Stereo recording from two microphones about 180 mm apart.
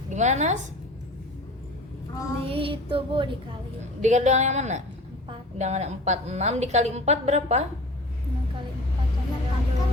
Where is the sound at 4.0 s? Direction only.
40° right (ahead or behind).